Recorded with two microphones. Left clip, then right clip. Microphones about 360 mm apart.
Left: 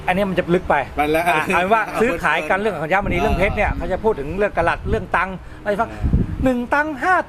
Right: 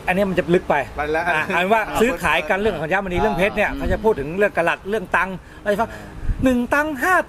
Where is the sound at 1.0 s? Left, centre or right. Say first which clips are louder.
Left 3 dB; left.